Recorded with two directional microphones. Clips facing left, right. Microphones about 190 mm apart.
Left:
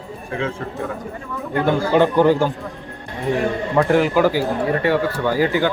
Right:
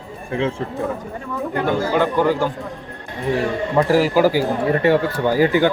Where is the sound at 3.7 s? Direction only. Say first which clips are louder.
Even; 5° right (ahead or behind).